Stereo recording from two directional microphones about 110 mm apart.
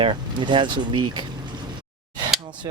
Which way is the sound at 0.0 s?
45° right (ahead or behind).